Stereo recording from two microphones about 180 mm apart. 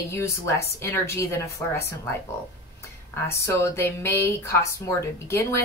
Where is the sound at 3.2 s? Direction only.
15° left (ahead or behind).